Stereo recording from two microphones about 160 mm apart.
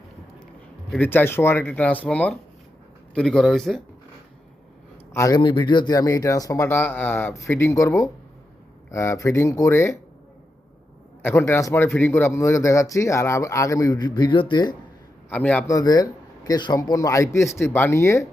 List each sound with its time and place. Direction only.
0.9 s speech: 10° left (ahead or behind)
5.1 s speech: 20° left (ahead or behind)
11.2 s speech: 15° left (ahead or behind)
15.3 s speech: 10° left (ahead or behind)
15.6 s speech: 20° left (ahead or behind)